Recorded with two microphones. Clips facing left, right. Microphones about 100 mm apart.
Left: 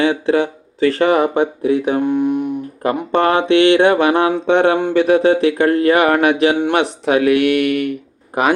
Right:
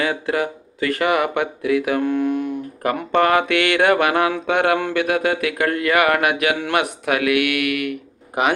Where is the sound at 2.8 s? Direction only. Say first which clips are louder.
Left 2 dB; 25° left (ahead or behind).